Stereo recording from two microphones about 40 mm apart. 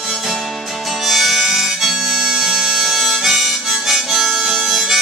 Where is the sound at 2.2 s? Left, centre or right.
Centre.